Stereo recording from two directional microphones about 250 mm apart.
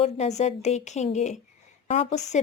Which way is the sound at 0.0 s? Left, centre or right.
Left.